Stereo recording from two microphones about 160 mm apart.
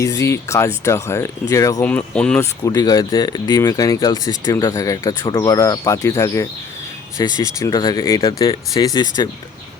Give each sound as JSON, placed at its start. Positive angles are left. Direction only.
{"t": 0.0, "sound": "speech", "side_deg": 20}
{"t": 1.9, "sound": "speech", "side_deg": 10}
{"t": 2.4, "sound": "speech", "side_deg": 25}